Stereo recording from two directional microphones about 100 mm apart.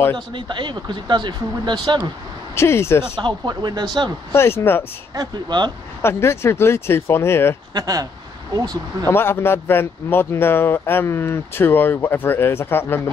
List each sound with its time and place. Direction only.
0.1 s speech: 55° right (ahead or behind)
2.5 s speech: 25° left (ahead or behind)
3.2 s speech: 50° right (ahead or behind)
4.3 s speech: 25° left (ahead or behind)
5.1 s speech: 45° right (ahead or behind)
6.0 s speech: 25° left (ahead or behind)
7.7 s speech: 40° right (ahead or behind)
9.0 s speech: 25° left (ahead or behind)